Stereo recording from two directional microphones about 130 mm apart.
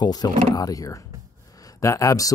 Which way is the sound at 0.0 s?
30° left (ahead or behind).